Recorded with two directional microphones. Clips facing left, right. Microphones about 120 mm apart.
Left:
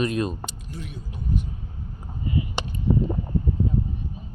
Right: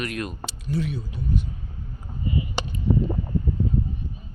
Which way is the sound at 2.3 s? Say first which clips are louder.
Even; 5° right (ahead or behind).